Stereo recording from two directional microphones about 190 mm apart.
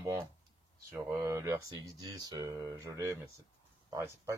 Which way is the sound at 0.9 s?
15° right (ahead or behind).